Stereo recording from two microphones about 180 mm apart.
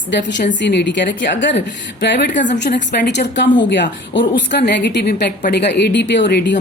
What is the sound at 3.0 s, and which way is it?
A woman's voice, 70° left (ahead or behind).